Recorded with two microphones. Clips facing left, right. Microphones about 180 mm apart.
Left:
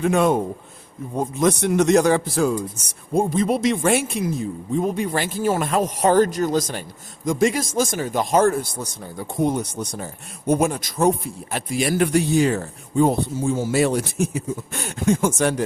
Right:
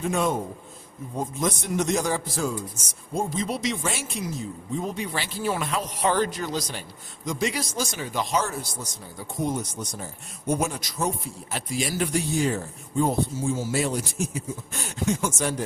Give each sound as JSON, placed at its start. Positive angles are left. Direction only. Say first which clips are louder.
{"t": 0.0, "sound": "a man's voice", "louder": "left 7 dB", "side_deg": 65}